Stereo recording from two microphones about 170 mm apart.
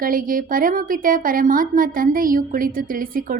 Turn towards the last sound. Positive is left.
turn(degrees=-55)  # may be behind; listen again after turning